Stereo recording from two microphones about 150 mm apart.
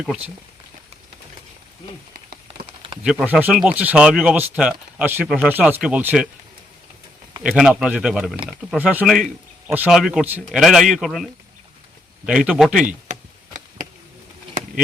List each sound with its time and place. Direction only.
3.0 s speech: 5° right (ahead or behind)
7.4 s speech: 5° right (ahead or behind)
13.1 s a sound: 55° right (ahead or behind)